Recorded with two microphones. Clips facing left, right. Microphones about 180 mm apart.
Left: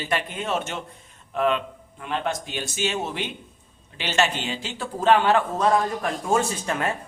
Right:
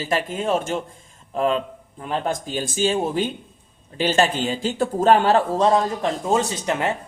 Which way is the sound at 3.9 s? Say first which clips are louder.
Right 5 dB; 45° right (ahead or behind).